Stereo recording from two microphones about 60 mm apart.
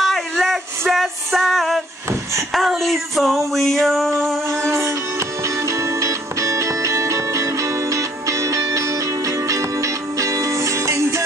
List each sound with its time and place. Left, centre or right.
0.0 s music: centre
2.5 s a sound: centre
4.5 s music: right